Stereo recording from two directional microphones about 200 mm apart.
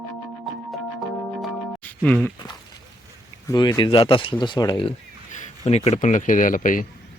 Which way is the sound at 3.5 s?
20° left (ahead or behind).